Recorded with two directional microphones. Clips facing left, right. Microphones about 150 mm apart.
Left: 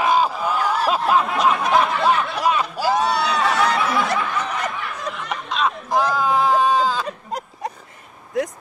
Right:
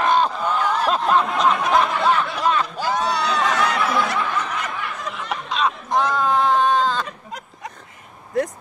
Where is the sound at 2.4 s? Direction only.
10° left (ahead or behind).